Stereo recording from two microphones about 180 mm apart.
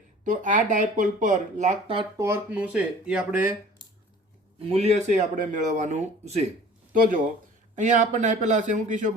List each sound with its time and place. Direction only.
0.3 s speech: 45° right (ahead or behind)
2.1 s speech: 15° right (ahead or behind)
4.6 s speech: 35° right (ahead or behind)
7.8 s speech: 40° right (ahead or behind)